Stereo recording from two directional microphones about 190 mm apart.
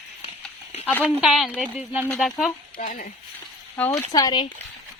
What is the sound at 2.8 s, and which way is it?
Frying, 45° left (ahead or behind).